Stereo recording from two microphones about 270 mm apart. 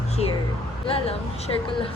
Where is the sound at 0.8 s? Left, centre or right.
Left.